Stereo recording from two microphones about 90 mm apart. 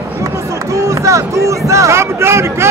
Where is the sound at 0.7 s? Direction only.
35° right (ahead or behind).